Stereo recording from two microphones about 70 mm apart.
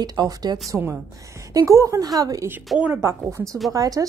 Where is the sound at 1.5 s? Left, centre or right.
Right.